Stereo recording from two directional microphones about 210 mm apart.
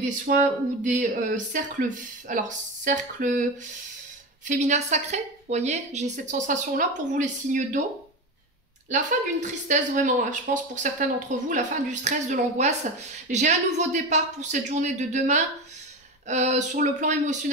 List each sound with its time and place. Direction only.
0.0 s speech: 40° right (ahead or behind)
4.5 s speech: 35° right (ahead or behind)
8.9 s speech: 35° right (ahead or behind)